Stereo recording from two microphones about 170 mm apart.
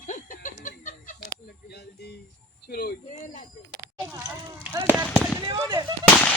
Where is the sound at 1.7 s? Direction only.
75° left (ahead or behind).